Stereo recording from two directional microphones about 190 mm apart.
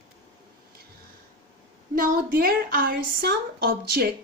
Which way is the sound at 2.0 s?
50° right (ahead or behind).